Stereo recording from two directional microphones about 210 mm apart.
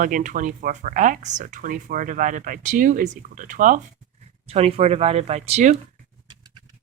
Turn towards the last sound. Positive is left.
turn(degrees=-30)  # may be behind; listen again after turning